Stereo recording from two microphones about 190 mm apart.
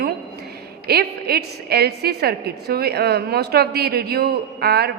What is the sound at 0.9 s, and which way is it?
A woman's voice, 55° right (ahead or behind).